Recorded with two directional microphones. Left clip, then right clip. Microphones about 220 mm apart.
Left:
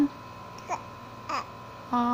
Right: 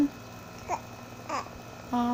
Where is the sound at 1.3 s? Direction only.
5° right (ahead or behind).